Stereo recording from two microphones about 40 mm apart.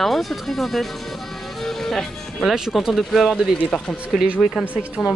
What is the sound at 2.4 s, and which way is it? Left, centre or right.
Speech, centre.